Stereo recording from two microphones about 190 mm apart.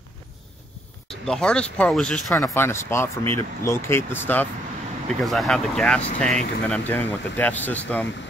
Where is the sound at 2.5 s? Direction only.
15° left (ahead or behind).